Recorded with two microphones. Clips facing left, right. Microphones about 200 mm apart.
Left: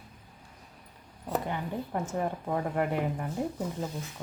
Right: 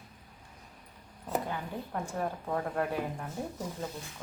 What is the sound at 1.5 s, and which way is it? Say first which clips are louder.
A woman's voice: left 4 dB; 20° left (ahead or behind).